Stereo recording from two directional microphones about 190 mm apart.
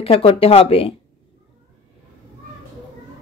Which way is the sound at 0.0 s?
30° left (ahead or behind).